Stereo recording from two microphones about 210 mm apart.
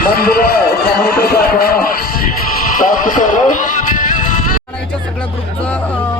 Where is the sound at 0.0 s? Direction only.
45° left (ahead or behind).